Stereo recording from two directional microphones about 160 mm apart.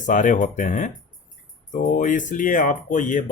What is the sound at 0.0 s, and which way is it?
Speech, 55° left (ahead or behind).